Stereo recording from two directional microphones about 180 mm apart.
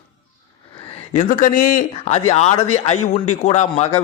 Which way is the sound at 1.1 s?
45° left (ahead or behind).